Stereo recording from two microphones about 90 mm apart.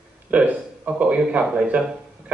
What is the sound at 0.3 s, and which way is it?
A man's voice, 15° right (ahead or behind).